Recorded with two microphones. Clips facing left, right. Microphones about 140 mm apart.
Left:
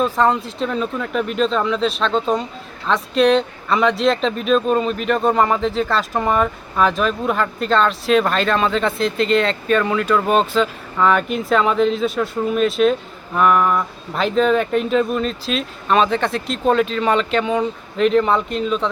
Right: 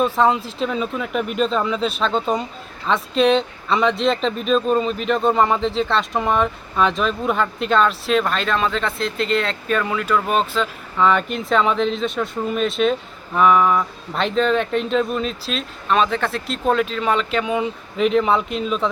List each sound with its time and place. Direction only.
0.0 s speech: centre (ahead or behind)